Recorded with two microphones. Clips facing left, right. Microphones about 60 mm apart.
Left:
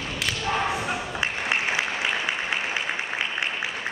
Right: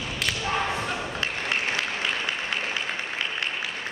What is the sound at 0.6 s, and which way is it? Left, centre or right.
Applause, centre.